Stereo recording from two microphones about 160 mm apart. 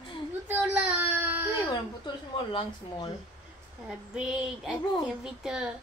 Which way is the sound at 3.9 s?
5° right (ahead or behind).